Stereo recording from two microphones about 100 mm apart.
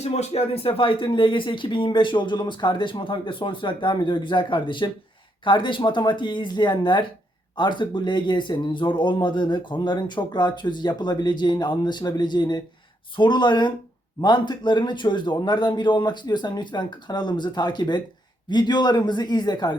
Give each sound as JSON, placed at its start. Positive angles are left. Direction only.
{"t": 0.0, "sound": "speech", "side_deg": 90}